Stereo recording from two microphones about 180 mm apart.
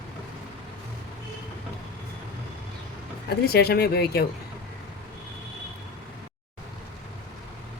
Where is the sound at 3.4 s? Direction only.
60° left (ahead or behind).